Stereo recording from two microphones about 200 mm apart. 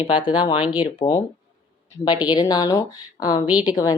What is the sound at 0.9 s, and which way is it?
A woman's voice, 20° left (ahead or behind).